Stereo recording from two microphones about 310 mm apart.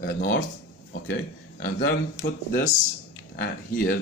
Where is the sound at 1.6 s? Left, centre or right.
Left.